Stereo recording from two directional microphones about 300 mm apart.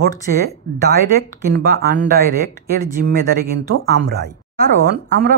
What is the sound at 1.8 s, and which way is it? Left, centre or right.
Speech, right.